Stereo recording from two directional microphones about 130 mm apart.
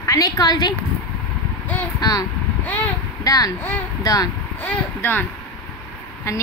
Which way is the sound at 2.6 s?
10° left (ahead or behind).